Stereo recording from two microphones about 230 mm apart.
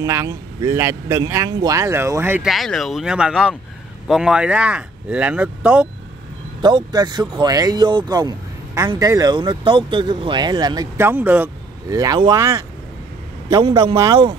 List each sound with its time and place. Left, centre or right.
0.0 s speech: centre
6.6 s a man's voice: centre